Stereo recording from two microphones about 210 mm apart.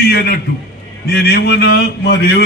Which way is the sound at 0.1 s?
50° left (ahead or behind).